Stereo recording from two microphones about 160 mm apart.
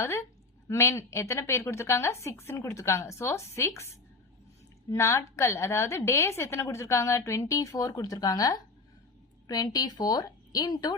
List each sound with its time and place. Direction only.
0.0 s a woman's voice: 15° left (ahead or behind)